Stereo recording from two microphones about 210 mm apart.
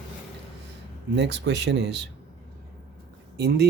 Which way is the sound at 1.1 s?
55° right (ahead or behind).